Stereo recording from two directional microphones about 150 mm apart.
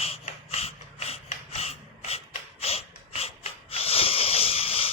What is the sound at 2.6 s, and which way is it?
Snort, 40° left (ahead or behind).